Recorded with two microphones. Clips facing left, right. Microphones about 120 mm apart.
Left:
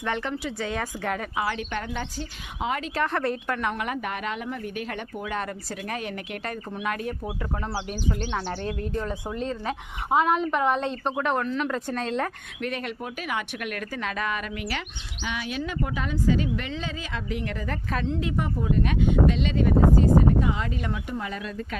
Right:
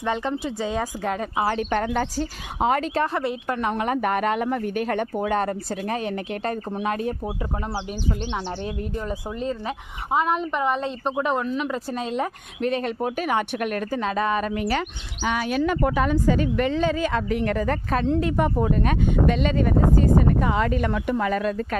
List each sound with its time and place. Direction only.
0.0 s speech: 20° right (ahead or behind)
1.5 s speech: 40° right (ahead or behind)
3.1 s speech: 10° right (ahead or behind)
3.5 s speech: 30° right (ahead or behind)
3.9 s speech: 45° right (ahead or behind); by 7.1 s 30° right (ahead or behind)
8.3 s speech: 10° right (ahead or behind)
12.6 s speech: 30° right (ahead or behind); by 21.8 s 50° right (ahead or behind)